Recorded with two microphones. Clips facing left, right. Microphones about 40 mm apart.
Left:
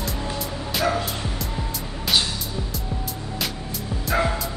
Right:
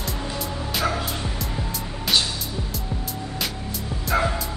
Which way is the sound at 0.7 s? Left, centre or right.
Centre.